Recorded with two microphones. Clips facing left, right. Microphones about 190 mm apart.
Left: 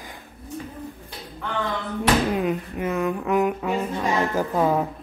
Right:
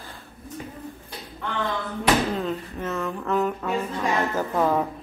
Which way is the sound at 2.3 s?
15° left (ahead or behind).